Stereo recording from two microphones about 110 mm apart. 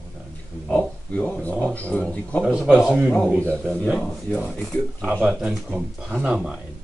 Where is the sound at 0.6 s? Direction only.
15° left (ahead or behind).